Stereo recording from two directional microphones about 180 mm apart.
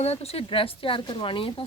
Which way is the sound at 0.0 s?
35° left (ahead or behind).